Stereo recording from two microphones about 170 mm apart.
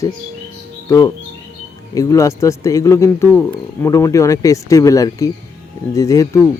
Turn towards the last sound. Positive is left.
turn(degrees=20)  # may be behind; listen again after turning